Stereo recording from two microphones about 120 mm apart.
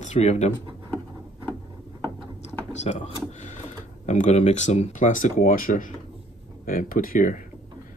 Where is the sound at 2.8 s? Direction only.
80° left.